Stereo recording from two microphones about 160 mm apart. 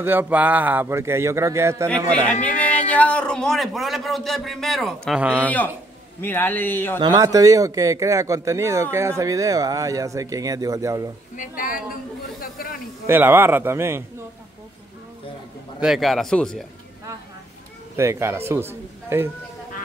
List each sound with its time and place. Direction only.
0.0 s speech: 10° right (ahead or behind)
2.4 s a man's voice: 10° left (ahead or behind)
5.3 s a man's voice: 10° left (ahead or behind)
7.0 s speech: 25° right (ahead or behind)
11.3 s a woman's voice: 60° left (ahead or behind)
13.0 s speech: 15° right (ahead or behind)
15.8 s a man's voice: centre (ahead or behind)
17.9 s speech: 15° right (ahead or behind)